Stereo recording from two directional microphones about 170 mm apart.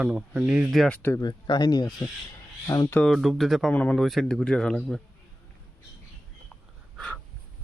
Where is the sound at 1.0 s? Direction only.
20° left (ahead or behind).